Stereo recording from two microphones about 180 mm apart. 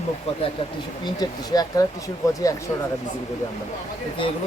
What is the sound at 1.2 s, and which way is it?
Speech, 20° left (ahead or behind).